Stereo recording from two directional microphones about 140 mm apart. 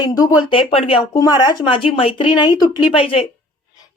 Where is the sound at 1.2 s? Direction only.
30° left (ahead or behind).